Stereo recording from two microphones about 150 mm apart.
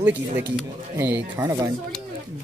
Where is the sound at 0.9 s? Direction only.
15° right (ahead or behind).